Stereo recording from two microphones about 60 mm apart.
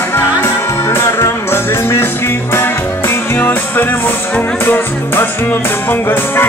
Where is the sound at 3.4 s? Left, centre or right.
Left.